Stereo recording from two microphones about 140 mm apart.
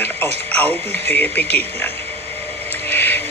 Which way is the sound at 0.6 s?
15° left (ahead or behind).